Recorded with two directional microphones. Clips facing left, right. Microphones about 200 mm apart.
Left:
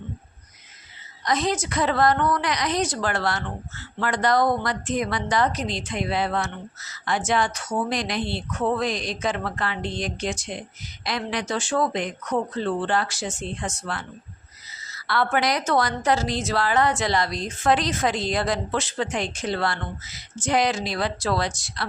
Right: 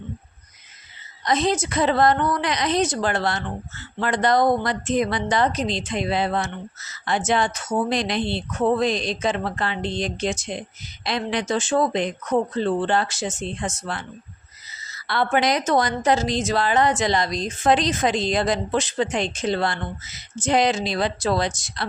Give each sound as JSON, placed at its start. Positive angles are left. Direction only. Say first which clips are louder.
{"t": 1.2, "sound": "a woman's voice", "louder": "right 3 dB", "side_deg": -25}
{"t": 15.0, "sound": "a woman's voice", "louder": "right 2 dB", "side_deg": -20}